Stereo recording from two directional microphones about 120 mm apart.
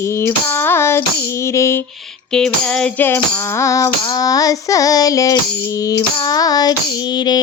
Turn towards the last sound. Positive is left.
turn(degrees=35)  # may be behind; listen again after turning